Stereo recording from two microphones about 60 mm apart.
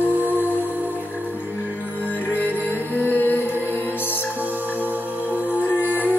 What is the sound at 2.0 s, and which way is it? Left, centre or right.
Music, left.